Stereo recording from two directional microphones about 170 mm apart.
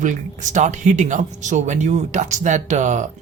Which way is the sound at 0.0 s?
45° right (ahead or behind).